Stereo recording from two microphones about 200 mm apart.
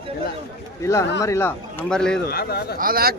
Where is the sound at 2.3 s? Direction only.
50° left (ahead or behind).